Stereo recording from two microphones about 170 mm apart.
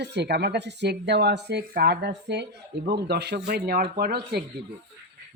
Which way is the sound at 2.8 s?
75° right (ahead or behind).